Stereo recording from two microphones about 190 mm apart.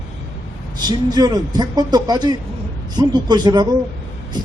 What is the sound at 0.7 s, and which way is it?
Speech, 20° right (ahead or behind).